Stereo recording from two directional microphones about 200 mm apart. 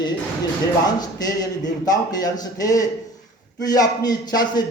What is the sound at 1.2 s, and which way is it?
Speech, 20° left (ahead or behind).